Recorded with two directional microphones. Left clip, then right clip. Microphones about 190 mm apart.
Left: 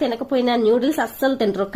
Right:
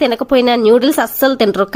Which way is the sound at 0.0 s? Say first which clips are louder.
Right 8 dB; 30° right (ahead or behind).